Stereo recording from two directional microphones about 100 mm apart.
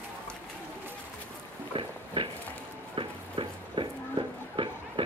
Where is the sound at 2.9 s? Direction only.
60° right (ahead or behind).